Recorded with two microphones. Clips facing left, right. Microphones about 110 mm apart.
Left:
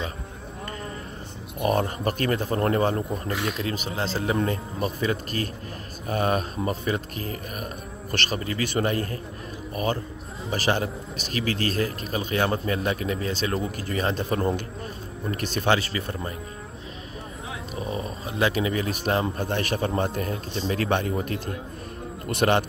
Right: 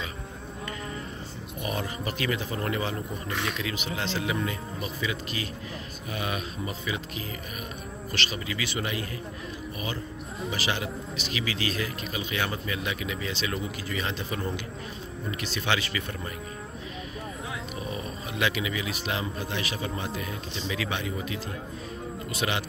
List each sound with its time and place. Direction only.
1.6 s a man's voice: 50° left (ahead or behind)
3.3 s speech: centre (ahead or behind)
3.5 s a man's voice: 40° left (ahead or behind)
10.5 s a man's voice: 45° left (ahead or behind)
17.7 s a man's voice: 30° left (ahead or behind); by 22.7 s 55° left (ahead or behind)